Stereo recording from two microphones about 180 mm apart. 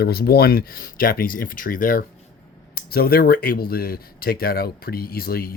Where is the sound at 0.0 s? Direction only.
60° left (ahead or behind).